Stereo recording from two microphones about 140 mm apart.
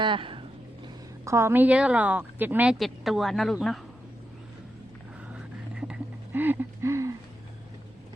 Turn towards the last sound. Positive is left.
turn(degrees=-20)  # may be behind; listen again after turning